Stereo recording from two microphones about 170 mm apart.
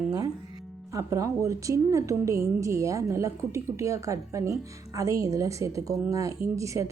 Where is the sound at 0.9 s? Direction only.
20° right (ahead or behind).